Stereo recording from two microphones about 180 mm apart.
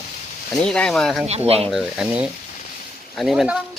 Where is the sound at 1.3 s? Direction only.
35° right (ahead or behind).